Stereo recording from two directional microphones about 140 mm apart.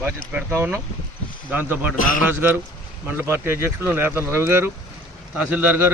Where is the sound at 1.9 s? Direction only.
75° left (ahead or behind).